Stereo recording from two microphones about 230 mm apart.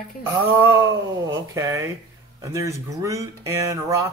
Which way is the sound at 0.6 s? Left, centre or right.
Centre.